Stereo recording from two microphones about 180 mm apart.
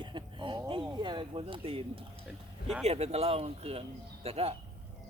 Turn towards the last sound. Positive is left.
turn(degrees=-35)  # may be behind; listen again after turning